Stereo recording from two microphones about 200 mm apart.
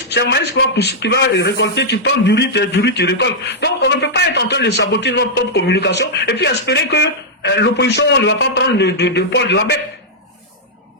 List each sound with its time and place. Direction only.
0.1 s a man's voice: 60° left (ahead or behind)